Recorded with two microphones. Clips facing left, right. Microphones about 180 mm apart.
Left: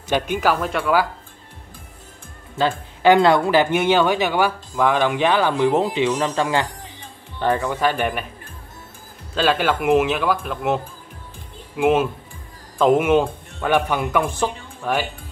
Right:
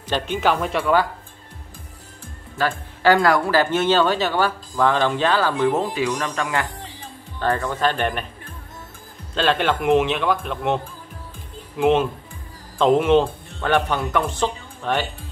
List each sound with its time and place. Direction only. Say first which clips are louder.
0.1 s a man's voice: left 1 dB; 10° left (ahead or behind)
2.5 s speech: left 2 dB; 20° left (ahead or behind)
9.3 s a man's voice: left 1 dB; 5° left (ahead or behind)